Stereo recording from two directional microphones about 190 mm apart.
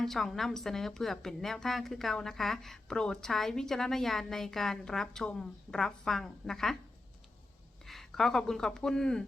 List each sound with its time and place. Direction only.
0.0 s a woman's voice: centre (ahead or behind)
7.9 s speech: centre (ahead or behind)